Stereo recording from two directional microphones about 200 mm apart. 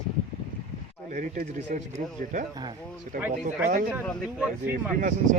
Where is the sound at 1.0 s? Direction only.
40° right (ahead or behind).